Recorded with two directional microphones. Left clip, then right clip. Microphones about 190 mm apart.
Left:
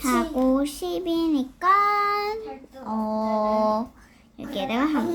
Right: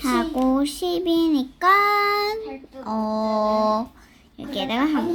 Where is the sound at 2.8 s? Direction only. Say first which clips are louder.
Right 2 dB; 20° right (ahead or behind).